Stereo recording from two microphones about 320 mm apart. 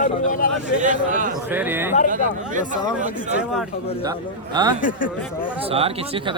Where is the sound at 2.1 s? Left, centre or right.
Right.